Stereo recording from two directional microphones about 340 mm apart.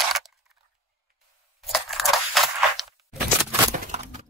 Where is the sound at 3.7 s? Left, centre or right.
Right.